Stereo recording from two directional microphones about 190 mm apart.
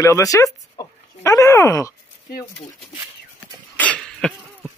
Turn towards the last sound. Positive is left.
turn(degrees=5)  # may be behind; listen again after turning